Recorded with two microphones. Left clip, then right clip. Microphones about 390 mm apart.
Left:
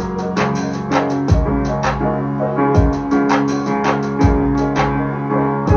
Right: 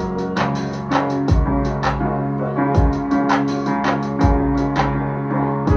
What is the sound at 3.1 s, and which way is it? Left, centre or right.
Music, right.